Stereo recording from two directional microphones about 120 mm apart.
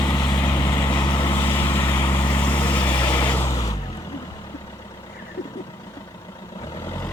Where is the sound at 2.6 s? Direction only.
15° left (ahead or behind).